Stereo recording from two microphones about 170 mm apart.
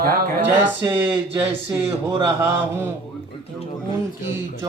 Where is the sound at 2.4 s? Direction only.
15° right (ahead or behind).